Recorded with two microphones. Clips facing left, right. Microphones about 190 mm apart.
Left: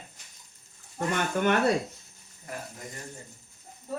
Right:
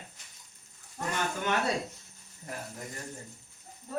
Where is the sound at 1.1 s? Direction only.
60° left (ahead or behind).